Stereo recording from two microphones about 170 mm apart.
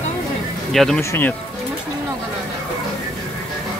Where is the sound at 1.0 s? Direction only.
15° left (ahead or behind).